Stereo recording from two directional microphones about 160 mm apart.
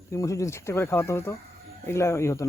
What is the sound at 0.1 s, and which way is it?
Speech, 20° left (ahead or behind).